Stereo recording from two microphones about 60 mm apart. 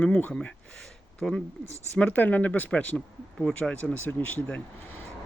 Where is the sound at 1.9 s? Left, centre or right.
Left.